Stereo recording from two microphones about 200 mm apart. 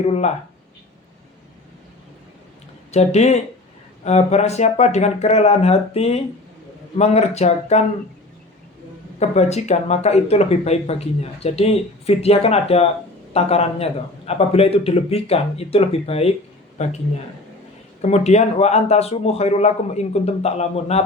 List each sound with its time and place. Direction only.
0.0 s speech: 35° left (ahead or behind)
2.9 s speech: 35° left (ahead or behind)
9.1 s speech: 35° left (ahead or behind)
18.0 s speech: 35° left (ahead or behind)